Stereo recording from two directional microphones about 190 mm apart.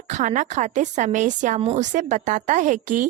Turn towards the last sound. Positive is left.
turn(degrees=-40)  # may be behind; listen again after turning